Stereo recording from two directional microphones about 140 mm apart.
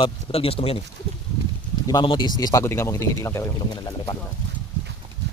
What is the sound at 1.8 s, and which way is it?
Speech, 35° left (ahead or behind).